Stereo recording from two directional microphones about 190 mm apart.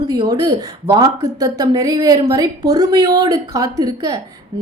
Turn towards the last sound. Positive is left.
turn(degrees=-20)  # may be behind; listen again after turning